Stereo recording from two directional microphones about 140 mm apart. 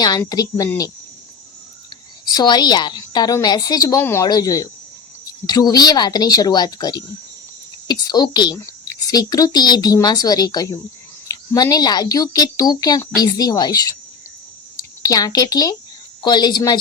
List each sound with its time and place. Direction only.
0.3 s a woman's voice: 25° left (ahead or behind)
2.2 s a woman's voice: 30° left (ahead or behind)
15.0 s a woman's voice: 25° left (ahead or behind)